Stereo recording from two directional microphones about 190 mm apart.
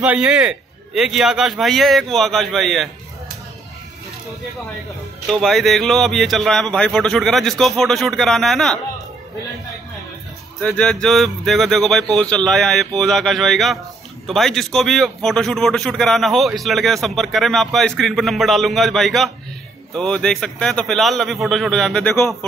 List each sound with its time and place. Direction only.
0.0 s a man's voice: 5° right (ahead or behind)
5.3 s a man's voice: centre (ahead or behind)
10.6 s a man's voice: 5° left (ahead or behind)